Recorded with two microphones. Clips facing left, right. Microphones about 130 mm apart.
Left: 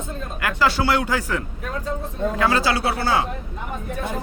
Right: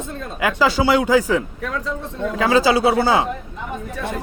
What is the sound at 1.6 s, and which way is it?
Speech, 90° right.